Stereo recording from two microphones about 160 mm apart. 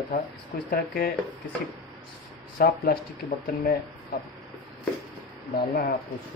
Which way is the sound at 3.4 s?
80° left.